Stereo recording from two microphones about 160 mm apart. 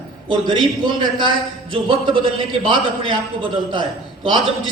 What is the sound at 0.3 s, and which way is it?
A man's voice, 30° right (ahead or behind).